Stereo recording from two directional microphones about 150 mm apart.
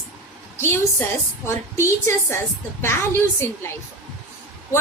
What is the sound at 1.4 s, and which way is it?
A woman's voice, 20° left (ahead or behind).